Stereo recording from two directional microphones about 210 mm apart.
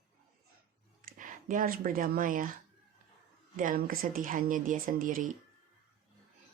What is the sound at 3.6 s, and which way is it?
Speech, 40° right (ahead or behind).